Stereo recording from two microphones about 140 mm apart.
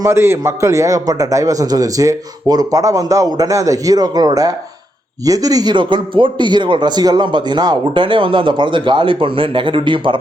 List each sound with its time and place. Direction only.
0.0 s a man's voice: 20° right (ahead or behind); by 10.2 s 35° right (ahead or behind)